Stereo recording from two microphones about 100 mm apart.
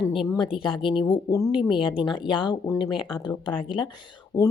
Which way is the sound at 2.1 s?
55° left (ahead or behind).